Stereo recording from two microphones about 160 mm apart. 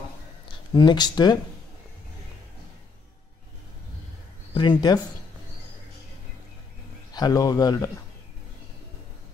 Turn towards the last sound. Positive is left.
turn(degrees=20)  # may be behind; listen again after turning